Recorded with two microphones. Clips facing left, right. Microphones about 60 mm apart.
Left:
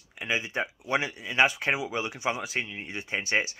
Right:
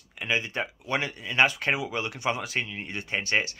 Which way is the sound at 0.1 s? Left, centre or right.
Centre.